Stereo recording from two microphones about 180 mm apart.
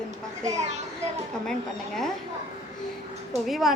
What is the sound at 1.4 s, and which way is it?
Speech, 5° left (ahead or behind).